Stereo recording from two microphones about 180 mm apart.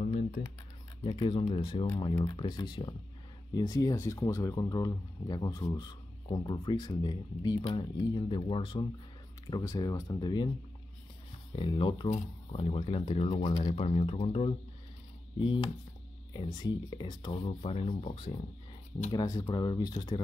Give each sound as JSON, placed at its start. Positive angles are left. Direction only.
{"t": 1.0, "sound": "speech", "side_deg": 30}
{"t": 11.5, "sound": "speech", "side_deg": 25}